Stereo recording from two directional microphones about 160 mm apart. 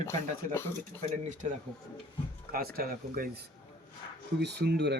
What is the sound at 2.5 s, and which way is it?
Speech, 70° right (ahead or behind).